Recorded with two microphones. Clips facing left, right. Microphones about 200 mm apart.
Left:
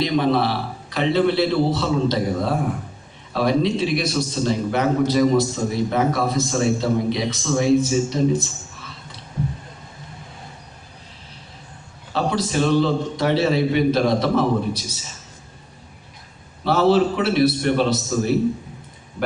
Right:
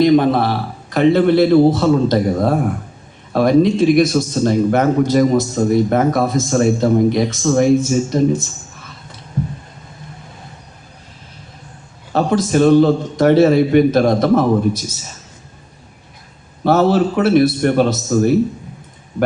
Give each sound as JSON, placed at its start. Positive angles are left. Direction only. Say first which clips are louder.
{"t": 0.0, "sound": "a man's voice", "louder": "right 7 dB", "side_deg": -50}
{"t": 12.1, "sound": "a man's voice", "louder": "right 7 dB", "side_deg": -50}
{"t": 16.6, "sound": "a man's voice", "louder": "right 3 dB", "side_deg": -50}